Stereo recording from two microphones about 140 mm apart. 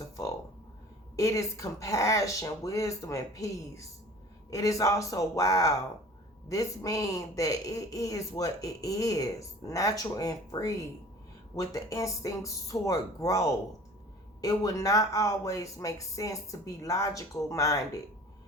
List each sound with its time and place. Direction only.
1.1 s speech: 20° left (ahead or behind)